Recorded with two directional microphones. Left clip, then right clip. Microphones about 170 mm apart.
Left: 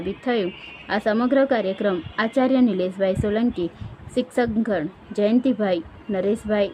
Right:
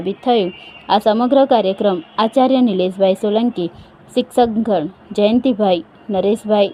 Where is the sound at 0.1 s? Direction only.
20° left (ahead or behind).